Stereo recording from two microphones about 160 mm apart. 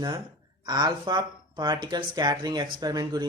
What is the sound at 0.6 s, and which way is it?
Speech, 25° right (ahead or behind).